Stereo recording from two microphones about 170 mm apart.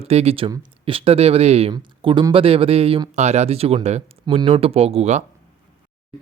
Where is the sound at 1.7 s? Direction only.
25° right (ahead or behind).